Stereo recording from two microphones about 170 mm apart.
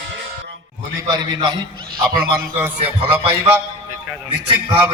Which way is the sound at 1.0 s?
25° right (ahead or behind).